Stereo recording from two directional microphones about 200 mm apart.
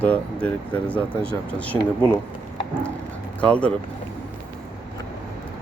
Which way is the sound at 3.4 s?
5° left (ahead or behind).